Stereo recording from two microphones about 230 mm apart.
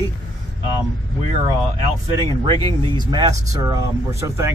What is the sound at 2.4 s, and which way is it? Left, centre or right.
Speech, right.